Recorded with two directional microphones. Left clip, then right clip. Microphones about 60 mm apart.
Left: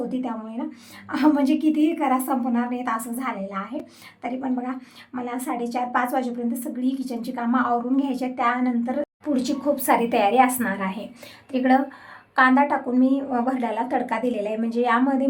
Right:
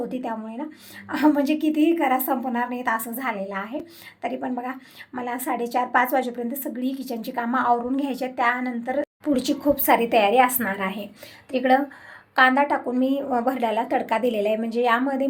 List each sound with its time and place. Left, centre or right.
0.1 s a woman's voice: right
5.1 s a woman's voice: right
9.2 s a woman's voice: right
9.7 s a woman's voice: right
13.0 s a woman's voice: right
13.8 s a woman's voice: right
14.1 s a woman's voice: right
14.6 s a woman's voice: right